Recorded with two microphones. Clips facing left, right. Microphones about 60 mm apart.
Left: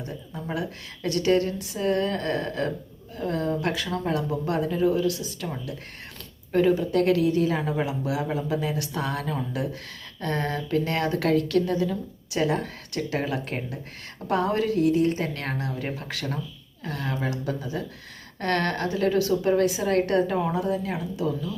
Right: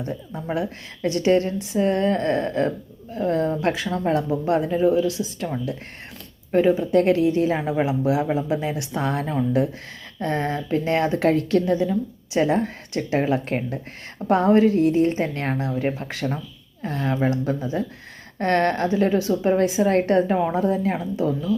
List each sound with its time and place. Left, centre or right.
0.0 s speech: right